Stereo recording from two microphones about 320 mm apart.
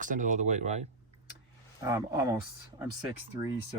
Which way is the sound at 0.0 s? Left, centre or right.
Right.